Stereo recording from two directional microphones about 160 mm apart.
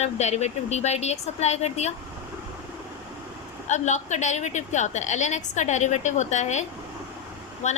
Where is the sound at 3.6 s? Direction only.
45° left (ahead or behind).